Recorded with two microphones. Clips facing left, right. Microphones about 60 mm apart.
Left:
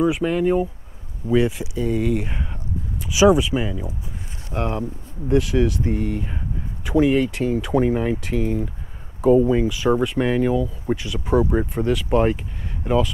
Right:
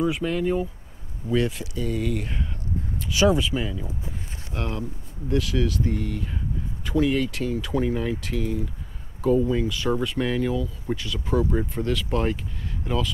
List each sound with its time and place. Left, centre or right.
0.0 s speech: centre